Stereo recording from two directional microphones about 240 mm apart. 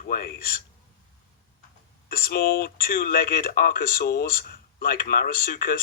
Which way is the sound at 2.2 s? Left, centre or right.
Left.